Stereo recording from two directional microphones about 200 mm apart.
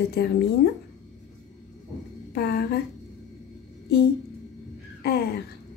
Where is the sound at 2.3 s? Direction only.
50° left (ahead or behind).